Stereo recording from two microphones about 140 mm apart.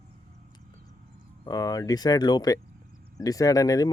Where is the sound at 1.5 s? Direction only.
25° left (ahead or behind).